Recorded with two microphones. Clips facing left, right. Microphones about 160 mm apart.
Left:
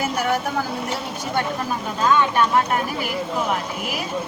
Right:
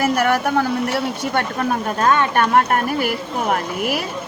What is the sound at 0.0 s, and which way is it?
Speech, 65° right (ahead or behind).